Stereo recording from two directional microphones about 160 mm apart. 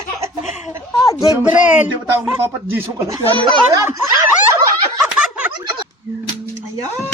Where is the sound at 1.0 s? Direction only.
20° left (ahead or behind).